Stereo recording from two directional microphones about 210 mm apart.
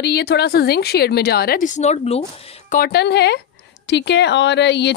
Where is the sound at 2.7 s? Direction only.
50° left (ahead or behind).